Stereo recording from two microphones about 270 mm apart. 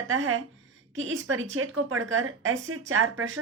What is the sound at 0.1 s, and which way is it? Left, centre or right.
Speech, right.